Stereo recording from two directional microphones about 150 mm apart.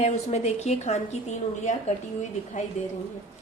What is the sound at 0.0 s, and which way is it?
A woman's voice, 50° left (ahead or behind).